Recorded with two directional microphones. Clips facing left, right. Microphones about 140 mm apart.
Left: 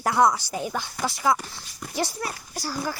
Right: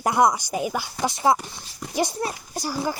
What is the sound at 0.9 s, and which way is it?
Speech, 20° right (ahead or behind).